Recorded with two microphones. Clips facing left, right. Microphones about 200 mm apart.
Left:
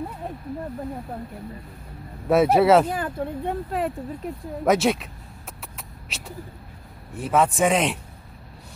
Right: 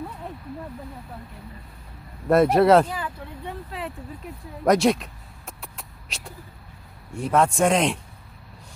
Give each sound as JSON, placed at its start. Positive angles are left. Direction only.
{"t": 2.2, "sound": "a man's voice", "side_deg": 5}
{"t": 2.9, "sound": "speech", "side_deg": 50}
{"t": 4.6, "sound": "a man's voice", "side_deg": 0}
{"t": 5.6, "sound": "a sound", "side_deg": 0}
{"t": 7.1, "sound": "a man's voice", "side_deg": 5}